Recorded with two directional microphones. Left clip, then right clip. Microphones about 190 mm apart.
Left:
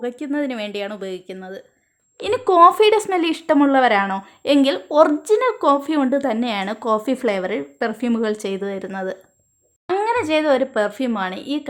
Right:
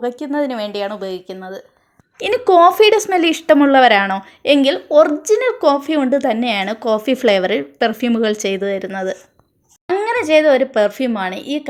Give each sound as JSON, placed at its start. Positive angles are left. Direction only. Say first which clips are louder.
{"t": 0.5, "sound": "a woman's voice", "louder": "right 5 dB", "side_deg": 0}
{"t": 1.3, "sound": "speech", "louder": "right 4 dB", "side_deg": 20}
{"t": 2.5, "sound": "a woman's voice", "louder": "right 2 dB", "side_deg": -5}